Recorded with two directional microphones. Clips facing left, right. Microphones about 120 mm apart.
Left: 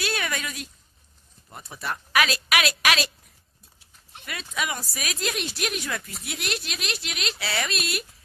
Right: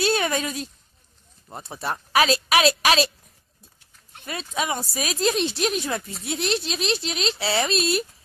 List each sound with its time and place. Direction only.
0.0 s a sound: 30° right (ahead or behind)
1.5 s speech: 30° right (ahead or behind)
4.2 s speech: 30° right (ahead or behind)